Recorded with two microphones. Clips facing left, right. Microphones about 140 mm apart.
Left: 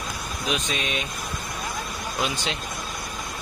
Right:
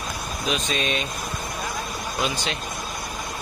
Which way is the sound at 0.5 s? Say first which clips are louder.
Right 2 dB; 15° left (ahead or behind).